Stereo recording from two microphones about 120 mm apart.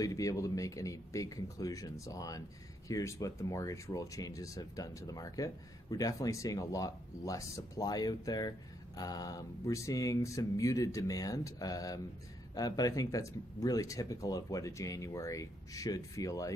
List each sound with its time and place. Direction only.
0.0 s speech: 30° left (ahead or behind)